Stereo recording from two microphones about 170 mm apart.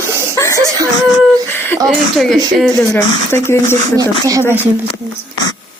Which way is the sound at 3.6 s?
45° right (ahead or behind).